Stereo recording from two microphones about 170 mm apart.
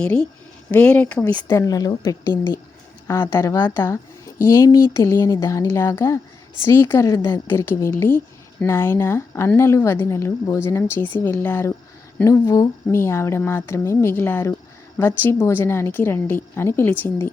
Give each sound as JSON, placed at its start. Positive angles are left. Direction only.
{"t": 0.0, "sound": "a woman's voice", "side_deg": 5}
{"t": 1.5, "sound": "a woman's voice", "side_deg": 20}